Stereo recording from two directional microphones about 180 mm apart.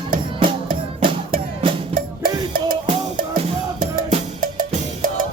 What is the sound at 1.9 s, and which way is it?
Music, 50° right (ahead or behind).